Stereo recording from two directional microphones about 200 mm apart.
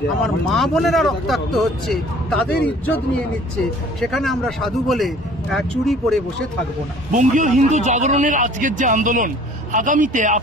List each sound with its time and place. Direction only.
0.2 s speech: centre (ahead or behind)
4.0 s speech: centre (ahead or behind)
7.1 s a man's voice: 40° right (ahead or behind)